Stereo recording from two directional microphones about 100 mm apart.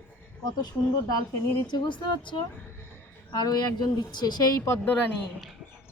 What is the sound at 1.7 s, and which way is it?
Speech, 50° left (ahead or behind).